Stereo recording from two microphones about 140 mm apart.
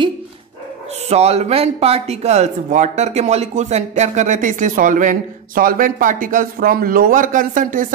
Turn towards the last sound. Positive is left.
turn(degrees=-70)  # may be behind; listen again after turning